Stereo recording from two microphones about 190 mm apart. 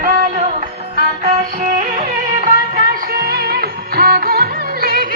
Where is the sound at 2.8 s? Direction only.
50° right (ahead or behind).